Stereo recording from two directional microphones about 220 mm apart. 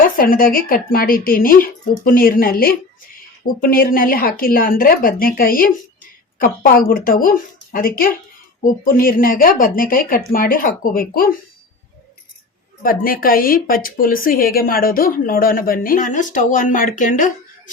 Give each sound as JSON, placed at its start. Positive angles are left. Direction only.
{"t": 0.2, "sound": "a woman's voice", "side_deg": 40}
{"t": 12.8, "sound": "a woman's voice", "side_deg": 40}